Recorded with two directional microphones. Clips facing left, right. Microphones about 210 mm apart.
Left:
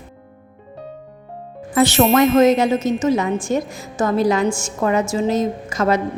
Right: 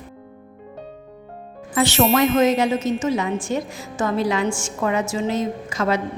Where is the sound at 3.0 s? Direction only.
45° left (ahead or behind).